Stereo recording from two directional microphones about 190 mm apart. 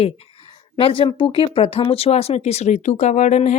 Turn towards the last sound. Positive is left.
turn(degrees=40)  # may be behind; listen again after turning